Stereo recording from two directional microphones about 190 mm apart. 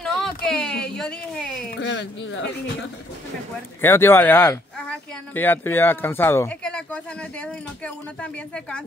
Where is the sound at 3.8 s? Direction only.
10° left (ahead or behind).